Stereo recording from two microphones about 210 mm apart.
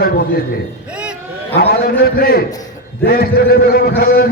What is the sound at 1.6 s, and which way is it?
A man's voice, 45° left (ahead or behind).